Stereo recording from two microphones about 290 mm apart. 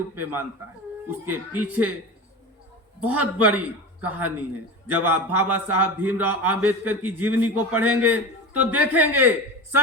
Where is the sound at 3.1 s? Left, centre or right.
Right.